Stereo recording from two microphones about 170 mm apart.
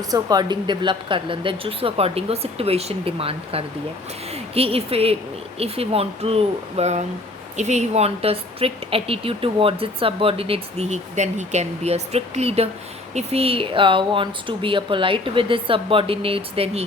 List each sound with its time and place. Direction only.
0.1 s a woman's voice: 25° right (ahead or behind)